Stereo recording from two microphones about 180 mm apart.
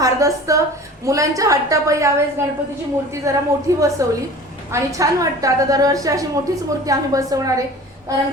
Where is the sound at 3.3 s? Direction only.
15° right (ahead or behind).